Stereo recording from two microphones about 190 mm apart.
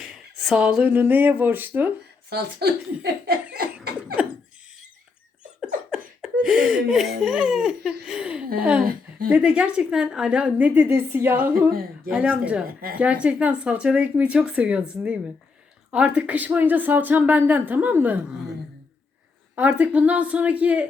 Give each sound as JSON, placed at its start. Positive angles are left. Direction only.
{"t": 0.0, "sound": "speech", "side_deg": -5}
{"t": 2.3, "sound": "speech", "side_deg": -60}
{"t": 4.2, "sound": "a sound", "side_deg": -5}
{"t": 5.5, "sound": "laughter", "side_deg": -5}
{"t": 8.0, "sound": "speech", "side_deg": -5}
{"t": 8.8, "sound": "a woman's voice", "side_deg": -50}
{"t": 9.3, "sound": "speech", "side_deg": -5}
{"t": 11.7, "sound": "a woman's voice", "side_deg": -50}
{"t": 12.1, "sound": "speech", "side_deg": -5}
{"t": 12.6, "sound": "a woman's voice", "side_deg": -50}
{"t": 13.0, "sound": "speech", "side_deg": -5}
{"t": 19.5, "sound": "speech", "side_deg": -10}